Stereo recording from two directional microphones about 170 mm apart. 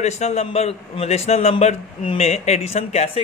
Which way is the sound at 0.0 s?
40° left (ahead or behind).